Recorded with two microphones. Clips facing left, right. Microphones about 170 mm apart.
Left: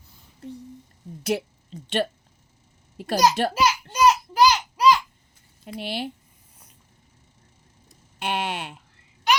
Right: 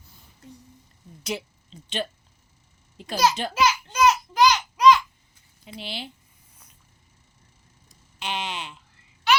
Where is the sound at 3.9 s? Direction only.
35° left (ahead or behind).